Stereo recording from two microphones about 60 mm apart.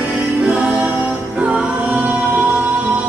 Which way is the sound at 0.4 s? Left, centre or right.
Right.